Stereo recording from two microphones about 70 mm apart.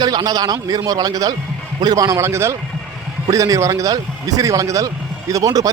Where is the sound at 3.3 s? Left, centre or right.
Right.